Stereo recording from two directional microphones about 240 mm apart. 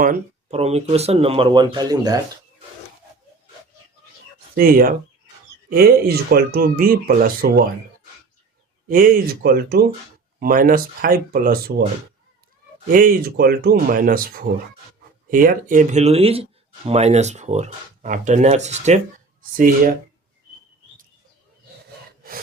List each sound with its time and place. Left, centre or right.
0.0 s speech: right; by 2.1 s centre
4.5 s speech: right
8.9 s speech: right
12.9 s speech: right